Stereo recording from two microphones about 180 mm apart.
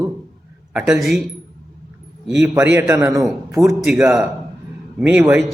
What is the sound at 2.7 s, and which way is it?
A man's voice, 15° right (ahead or behind).